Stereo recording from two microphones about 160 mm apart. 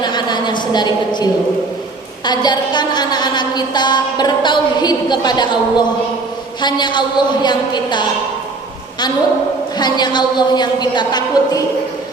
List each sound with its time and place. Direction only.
0.0 s a sound: 25° left (ahead or behind)
2.2 s a woman's voice: 25° left (ahead or behind)
9.7 s a woman's voice: 25° left (ahead or behind)